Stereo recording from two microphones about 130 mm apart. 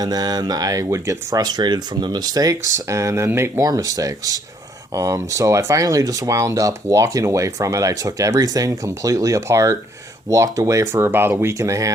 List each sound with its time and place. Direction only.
0.0 s speech: 30° right (ahead or behind)